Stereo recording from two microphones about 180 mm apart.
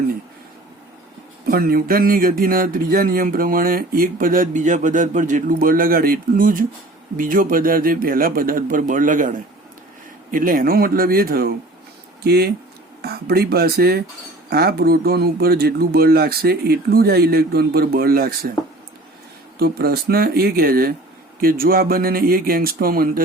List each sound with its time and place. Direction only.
1.5 s speech: 55° right (ahead or behind)
10.3 s speech: 50° right (ahead or behind)
19.5 s speech: 60° right (ahead or behind)